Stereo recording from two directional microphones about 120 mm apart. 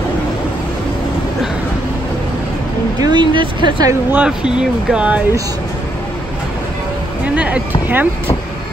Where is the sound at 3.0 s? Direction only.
40° right (ahead or behind).